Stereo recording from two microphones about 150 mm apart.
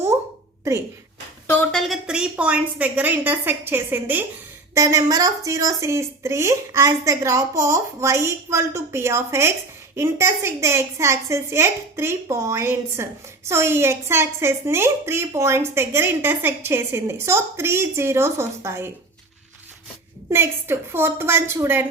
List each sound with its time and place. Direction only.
1.7 s a woman's voice: centre (ahead or behind); by 18.9 s 20° right (ahead or behind)
20.3 s a woman's voice: 15° right (ahead or behind)